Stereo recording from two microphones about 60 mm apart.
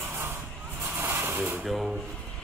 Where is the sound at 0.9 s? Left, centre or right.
Right.